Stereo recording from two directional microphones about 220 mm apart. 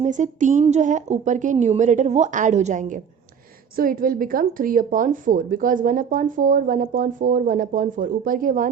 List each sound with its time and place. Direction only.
0.0 s a woman's voice: 35° right (ahead or behind)